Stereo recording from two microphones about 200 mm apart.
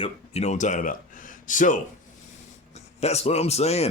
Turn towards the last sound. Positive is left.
turn(degrees=30)  # may be behind; listen again after turning